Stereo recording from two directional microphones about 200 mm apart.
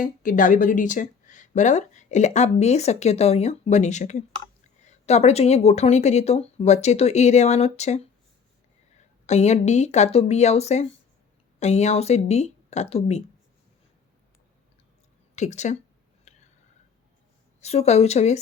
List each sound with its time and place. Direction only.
0.0 s speech: 45° left (ahead or behind)
9.2 s speech: 35° left (ahead or behind)
15.4 s speech: 35° left (ahead or behind)
16.3 s a sound: 35° left (ahead or behind)
17.6 s speech: 30° left (ahead or behind)